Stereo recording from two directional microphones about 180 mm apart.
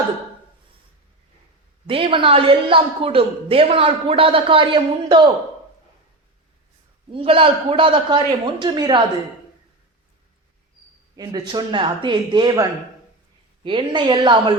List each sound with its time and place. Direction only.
1.9 s a woman's voice: 30° right (ahead or behind)
7.1 s a woman's voice: 30° right (ahead or behind)
11.2 s a woman's voice: 25° right (ahead or behind)
13.7 s a woman's voice: 25° right (ahead or behind)